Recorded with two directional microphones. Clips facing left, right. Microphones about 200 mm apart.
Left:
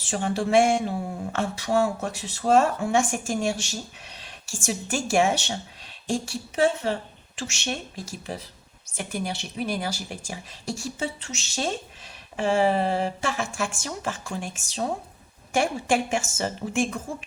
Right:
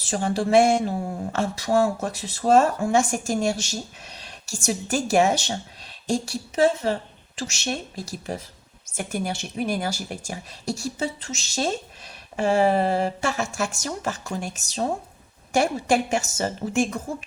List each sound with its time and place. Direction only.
0.0 s speech: 40° right (ahead or behind)